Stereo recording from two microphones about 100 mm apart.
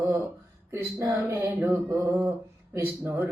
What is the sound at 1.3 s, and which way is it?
Mantra, 25° right (ahead or behind).